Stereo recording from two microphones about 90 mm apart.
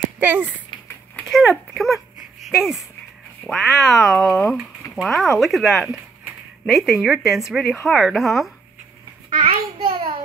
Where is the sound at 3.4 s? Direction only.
Centre (ahead or behind).